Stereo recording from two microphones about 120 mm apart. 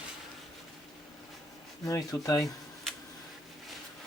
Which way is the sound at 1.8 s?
30° left (ahead or behind).